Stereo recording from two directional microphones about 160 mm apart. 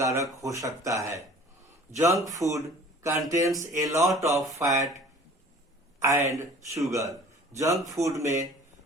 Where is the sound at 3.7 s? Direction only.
20° right (ahead or behind).